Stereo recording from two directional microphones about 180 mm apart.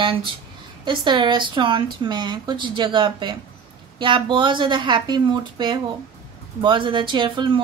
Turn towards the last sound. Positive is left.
turn(degrees=-25)  # may be behind; listen again after turning